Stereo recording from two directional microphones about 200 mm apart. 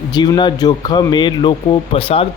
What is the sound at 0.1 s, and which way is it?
Speech, 20° left (ahead or behind).